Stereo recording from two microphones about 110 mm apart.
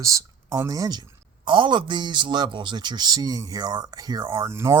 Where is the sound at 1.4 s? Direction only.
45° right (ahead or behind).